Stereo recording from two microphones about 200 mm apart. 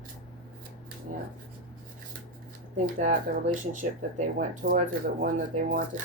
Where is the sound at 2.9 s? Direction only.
40° right (ahead or behind).